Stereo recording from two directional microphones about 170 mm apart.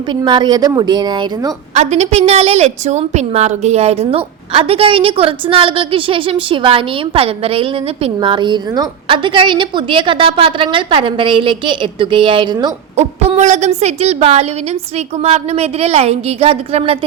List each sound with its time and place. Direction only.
0.1 s a woman's voice: 25° right (ahead or behind)
1.7 s a woman's voice: 40° right (ahead or behind)
13.0 s a woman's voice: 40° right (ahead or behind)